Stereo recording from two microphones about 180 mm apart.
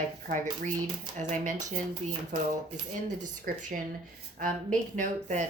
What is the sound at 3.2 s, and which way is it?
Speech, 45° right (ahead or behind).